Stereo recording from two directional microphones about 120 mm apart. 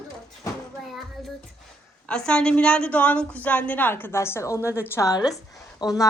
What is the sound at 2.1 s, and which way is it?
A woman's voice, 5° left (ahead or behind).